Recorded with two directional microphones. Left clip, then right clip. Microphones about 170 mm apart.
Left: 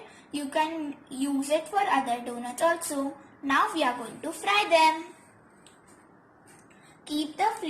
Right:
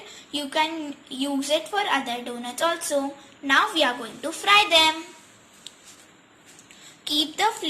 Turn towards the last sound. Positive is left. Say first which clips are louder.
# right 4 dB
turn(degrees=0)  # may be behind; listen again after turning